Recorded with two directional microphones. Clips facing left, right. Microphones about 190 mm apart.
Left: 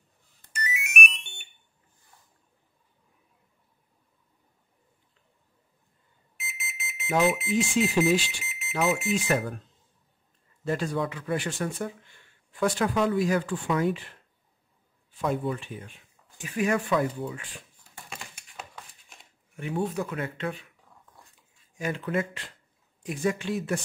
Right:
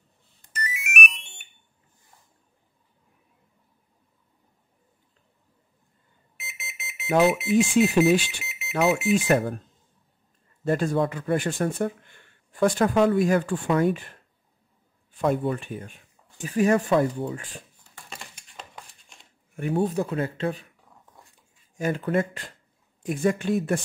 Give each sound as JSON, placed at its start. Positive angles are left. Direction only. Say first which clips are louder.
{"t": 0.7, "sound": "music", "louder": "right 2 dB", "side_deg": 0}
{"t": 6.4, "sound": "alarm", "louder": "left 2 dB", "side_deg": 0}
{"t": 7.1, "sound": "speech", "louder": "right 4 dB", "side_deg": -60}
{"t": 8.5, "sound": "alarm clock", "louder": "right 1 dB", "side_deg": 0}
{"t": 8.7, "sound": "speech", "louder": "right 4 dB", "side_deg": -65}
{"t": 9.1, "sound": "speech", "louder": "right 5 dB", "side_deg": -50}
{"t": 10.6, "sound": "speech", "louder": "right 5 dB", "side_deg": -50}
{"t": 15.1, "sound": "speech", "louder": "right 4 dB", "side_deg": -55}
{"t": 18.1, "sound": "a sound", "louder": "even", "side_deg": 5}
{"t": 19.7, "sound": "speech", "louder": "right 5 dB", "side_deg": -35}
{"t": 21.7, "sound": "speech", "louder": "right 4 dB", "side_deg": -45}